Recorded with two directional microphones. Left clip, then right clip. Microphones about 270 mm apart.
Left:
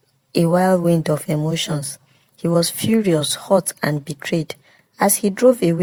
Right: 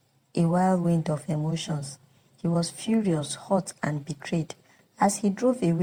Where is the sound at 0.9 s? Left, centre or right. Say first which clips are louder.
Left 10 dB; left.